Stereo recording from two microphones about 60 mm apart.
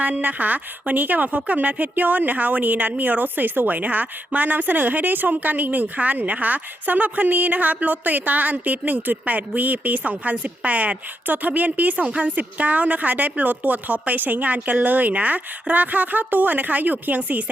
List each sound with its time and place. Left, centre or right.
0.0 s speech: right